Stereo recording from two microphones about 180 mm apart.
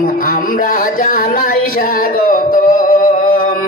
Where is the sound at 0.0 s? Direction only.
50° left (ahead or behind).